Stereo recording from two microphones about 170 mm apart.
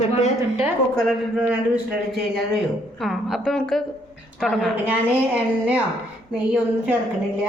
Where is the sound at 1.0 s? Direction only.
5° right (ahead or behind).